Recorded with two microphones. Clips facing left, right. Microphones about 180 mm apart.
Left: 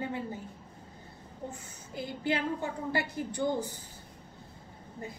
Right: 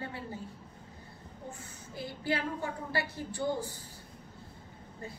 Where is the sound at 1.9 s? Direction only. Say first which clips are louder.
Left 2 dB; 20° left (ahead or behind).